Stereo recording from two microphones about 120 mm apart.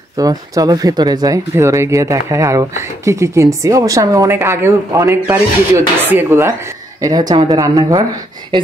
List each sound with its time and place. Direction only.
0.2 s speech: 30° right (ahead or behind)
7.0 s speech: 30° right (ahead or behind)